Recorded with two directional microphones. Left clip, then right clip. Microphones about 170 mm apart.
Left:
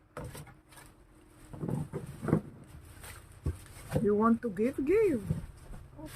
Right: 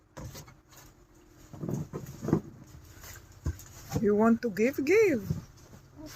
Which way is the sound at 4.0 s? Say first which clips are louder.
Right 3 dB; 30° right (ahead or behind).